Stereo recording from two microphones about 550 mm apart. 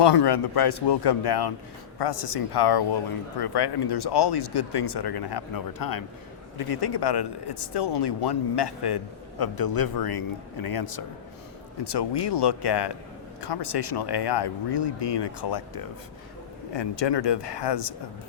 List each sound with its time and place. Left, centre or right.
0.0 s a man's voice: left